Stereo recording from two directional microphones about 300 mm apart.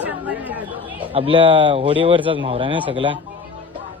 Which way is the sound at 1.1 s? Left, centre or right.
Centre.